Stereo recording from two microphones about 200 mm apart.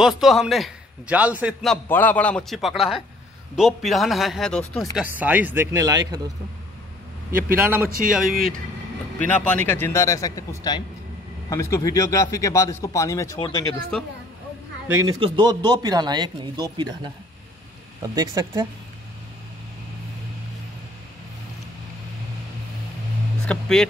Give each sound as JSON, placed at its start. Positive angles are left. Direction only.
{"t": 0.0, "sound": "a man's voice", "side_deg": 0}
{"t": 5.1, "sound": "speech", "side_deg": -10}
{"t": 7.6, "sound": "a man's voice", "side_deg": -10}
{"t": 13.9, "sound": "a man's voice", "side_deg": 5}
{"t": 15.1, "sound": "speech", "side_deg": -25}
{"t": 23.4, "sound": "speech", "side_deg": 5}